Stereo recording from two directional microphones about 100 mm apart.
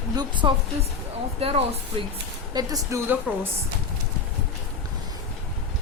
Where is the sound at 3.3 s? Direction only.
15° right (ahead or behind).